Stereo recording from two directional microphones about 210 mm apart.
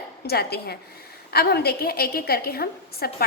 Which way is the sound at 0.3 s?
50° left (ahead or behind).